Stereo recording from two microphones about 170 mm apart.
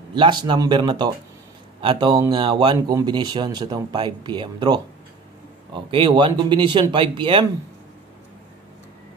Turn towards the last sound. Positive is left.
turn(degrees=-30)  # may be behind; listen again after turning